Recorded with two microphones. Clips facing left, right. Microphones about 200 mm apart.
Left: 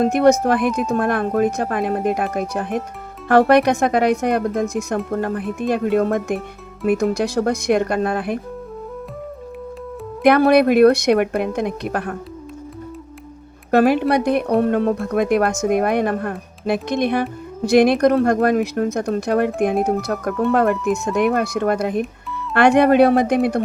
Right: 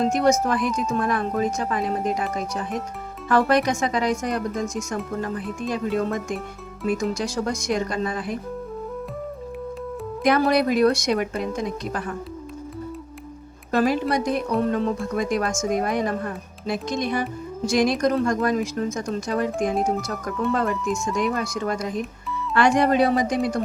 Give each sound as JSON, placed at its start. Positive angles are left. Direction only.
{"t": 0.0, "sound": "speech", "side_deg": 60}
{"t": 10.2, "sound": "speech", "side_deg": 60}
{"t": 13.7, "sound": "speech", "side_deg": 60}